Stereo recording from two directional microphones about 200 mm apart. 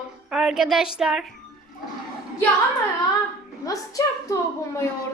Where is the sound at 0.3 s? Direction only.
Centre (ahead or behind).